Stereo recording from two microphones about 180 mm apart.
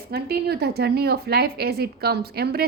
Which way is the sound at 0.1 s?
60° right (ahead or behind).